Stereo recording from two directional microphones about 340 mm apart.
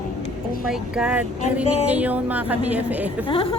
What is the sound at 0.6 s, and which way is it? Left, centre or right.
A woman's voice, centre.